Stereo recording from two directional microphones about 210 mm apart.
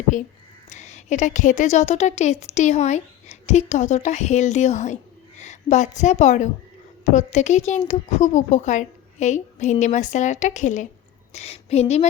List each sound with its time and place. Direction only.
0.1 s a woman's voice: 40° left (ahead or behind)